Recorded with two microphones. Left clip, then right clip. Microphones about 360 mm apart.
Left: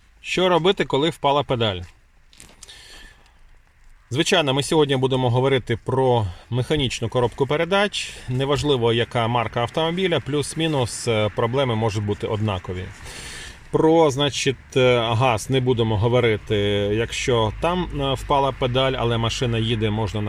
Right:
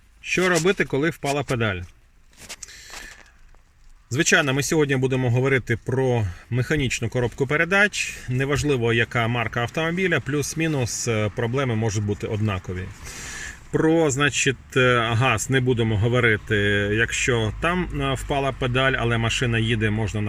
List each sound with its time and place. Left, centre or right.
0.3 s speech: centre
4.4 s speech: centre
11.8 s speech: left
12.3 s speech: centre